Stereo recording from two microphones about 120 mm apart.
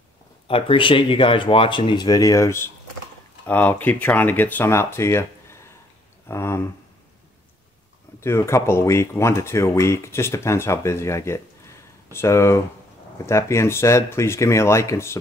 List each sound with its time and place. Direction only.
0.5 s speech: 50° left (ahead or behind); by 6.7 s 20° left (ahead or behind)
8.2 s speech: 25° left (ahead or behind)